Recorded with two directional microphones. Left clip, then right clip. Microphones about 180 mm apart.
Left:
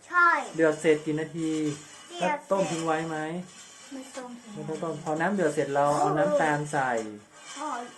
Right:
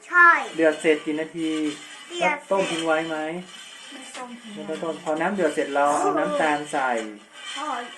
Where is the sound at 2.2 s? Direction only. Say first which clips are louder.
Right 4 dB; 10° left (ahead or behind).